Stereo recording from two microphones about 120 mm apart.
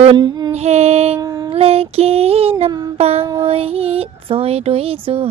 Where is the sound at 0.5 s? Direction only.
60° right (ahead or behind).